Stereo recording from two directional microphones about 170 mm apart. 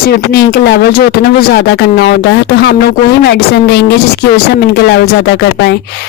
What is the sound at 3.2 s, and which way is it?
Speech, 75° left (ahead or behind).